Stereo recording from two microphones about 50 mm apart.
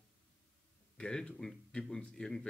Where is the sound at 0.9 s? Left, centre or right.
Centre.